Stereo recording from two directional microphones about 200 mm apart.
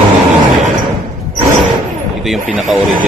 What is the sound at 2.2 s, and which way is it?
Speech, centre (ahead or behind).